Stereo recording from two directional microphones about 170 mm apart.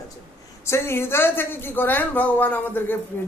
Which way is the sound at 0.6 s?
15° left (ahead or behind).